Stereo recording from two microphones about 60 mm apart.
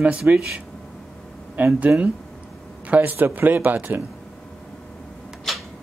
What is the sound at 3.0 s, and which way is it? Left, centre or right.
Speech, right.